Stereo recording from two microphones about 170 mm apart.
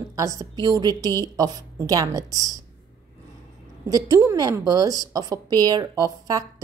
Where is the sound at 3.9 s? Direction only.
20° right (ahead or behind).